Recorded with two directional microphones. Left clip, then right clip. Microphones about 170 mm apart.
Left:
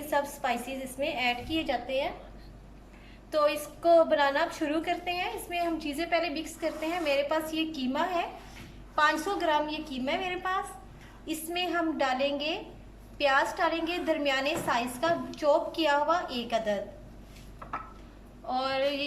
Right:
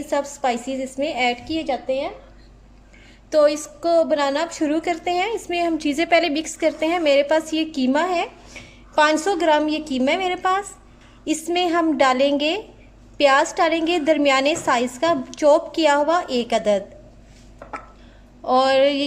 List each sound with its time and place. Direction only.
0.1 s a woman's voice: 30° right (ahead or behind)
3.3 s a woman's voice: 30° right (ahead or behind)
18.4 s a woman's voice: 50° right (ahead or behind)